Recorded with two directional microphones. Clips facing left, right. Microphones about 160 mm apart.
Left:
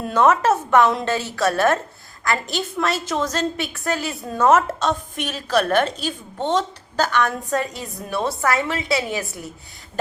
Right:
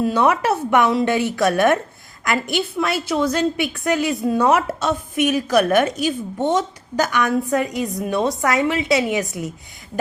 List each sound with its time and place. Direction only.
0.0 s a woman's voice: 10° right (ahead or behind)